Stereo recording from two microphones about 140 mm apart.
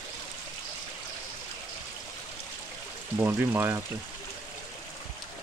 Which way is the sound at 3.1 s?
15° right (ahead or behind).